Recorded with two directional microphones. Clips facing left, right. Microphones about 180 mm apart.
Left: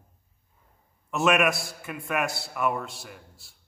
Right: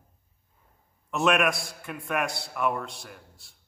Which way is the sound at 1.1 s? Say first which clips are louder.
Left 1 dB; 5° left (ahead or behind).